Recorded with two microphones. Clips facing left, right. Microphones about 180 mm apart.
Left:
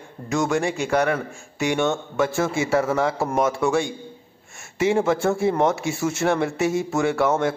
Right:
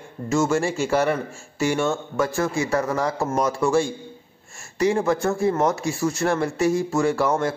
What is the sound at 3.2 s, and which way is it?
Speech, 20° left (ahead or behind).